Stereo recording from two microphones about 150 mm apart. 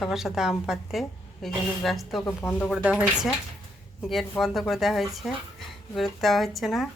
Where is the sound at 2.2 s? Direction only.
15° left (ahead or behind).